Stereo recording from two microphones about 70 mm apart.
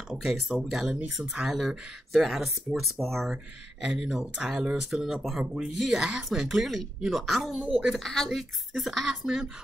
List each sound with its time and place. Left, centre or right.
0.1 s speech: centre